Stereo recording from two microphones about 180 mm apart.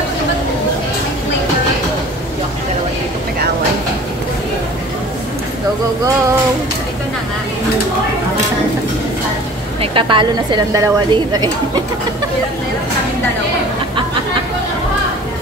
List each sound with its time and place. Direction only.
9.8 s speech: 30° right (ahead or behind)